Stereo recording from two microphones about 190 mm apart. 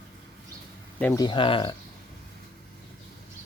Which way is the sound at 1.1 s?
25° left (ahead or behind).